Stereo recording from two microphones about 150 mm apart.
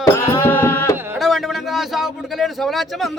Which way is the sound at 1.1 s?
Centre (ahead or behind).